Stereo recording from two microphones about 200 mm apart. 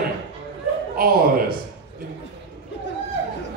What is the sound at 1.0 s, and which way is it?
Speech, 50° right (ahead or behind).